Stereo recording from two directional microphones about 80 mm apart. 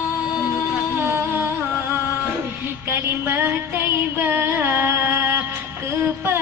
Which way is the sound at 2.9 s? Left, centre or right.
Right.